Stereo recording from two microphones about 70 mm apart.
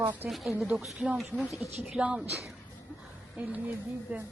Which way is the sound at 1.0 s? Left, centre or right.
Right.